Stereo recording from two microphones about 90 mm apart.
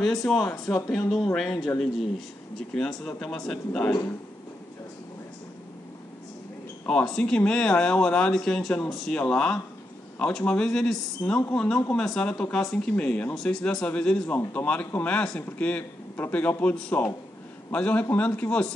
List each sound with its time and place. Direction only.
0.0 s speech: 5° left (ahead or behind)
6.9 s speech: 10° left (ahead or behind)